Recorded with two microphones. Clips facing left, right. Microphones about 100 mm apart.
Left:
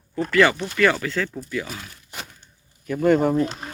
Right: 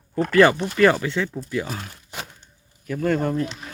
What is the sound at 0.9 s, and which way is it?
Speech, 25° right (ahead or behind).